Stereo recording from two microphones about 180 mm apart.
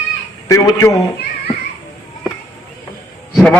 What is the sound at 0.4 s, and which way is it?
Speech, 20° left (ahead or behind).